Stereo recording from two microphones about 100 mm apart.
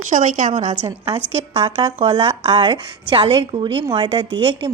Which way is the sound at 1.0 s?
75° right (ahead or behind).